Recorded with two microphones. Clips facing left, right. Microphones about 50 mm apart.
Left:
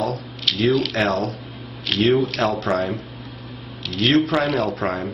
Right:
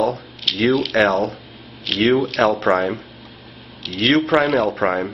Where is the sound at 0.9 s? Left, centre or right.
Right.